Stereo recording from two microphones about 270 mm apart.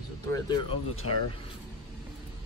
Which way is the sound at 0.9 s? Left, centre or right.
Left.